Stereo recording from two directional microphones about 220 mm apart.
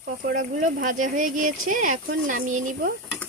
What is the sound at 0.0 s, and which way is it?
Speech, 40° right (ahead or behind).